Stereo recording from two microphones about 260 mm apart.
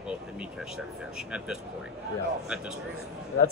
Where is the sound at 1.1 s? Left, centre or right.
Centre.